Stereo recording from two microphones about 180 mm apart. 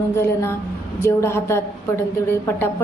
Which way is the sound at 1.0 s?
15° left (ahead or behind).